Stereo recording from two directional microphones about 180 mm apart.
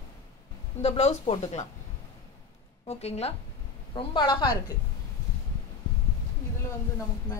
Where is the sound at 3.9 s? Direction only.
25° left (ahead or behind).